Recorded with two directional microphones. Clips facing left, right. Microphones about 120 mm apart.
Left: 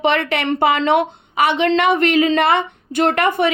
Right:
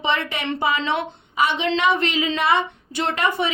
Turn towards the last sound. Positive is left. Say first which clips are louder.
# left 6 dB
turn(degrees=60)  # may be behind; listen again after turning